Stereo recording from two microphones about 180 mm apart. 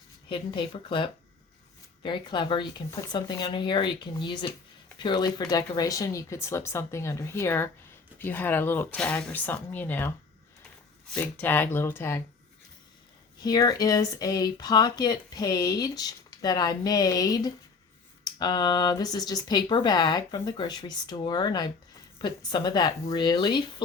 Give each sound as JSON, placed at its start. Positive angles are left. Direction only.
{"t": 0.3, "sound": "speech", "side_deg": 30}
{"t": 13.4, "sound": "speech", "side_deg": 20}